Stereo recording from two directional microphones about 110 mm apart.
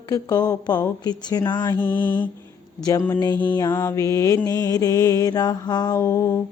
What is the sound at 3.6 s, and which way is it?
Mantra, 25° left (ahead or behind).